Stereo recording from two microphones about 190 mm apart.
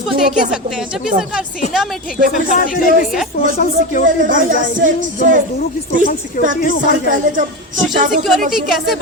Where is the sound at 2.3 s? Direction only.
45° left (ahead or behind).